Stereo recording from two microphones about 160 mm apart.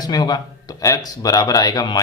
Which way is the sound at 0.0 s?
25° left (ahead or behind).